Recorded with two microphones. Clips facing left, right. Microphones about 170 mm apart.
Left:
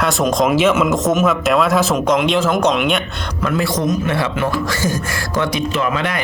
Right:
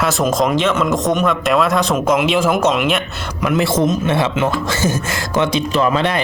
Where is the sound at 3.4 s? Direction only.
20° right (ahead or behind).